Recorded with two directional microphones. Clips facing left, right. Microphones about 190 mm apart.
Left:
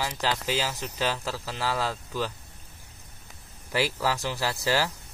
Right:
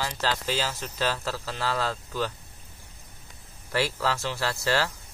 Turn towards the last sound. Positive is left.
turn(degrees=15)  # may be behind; listen again after turning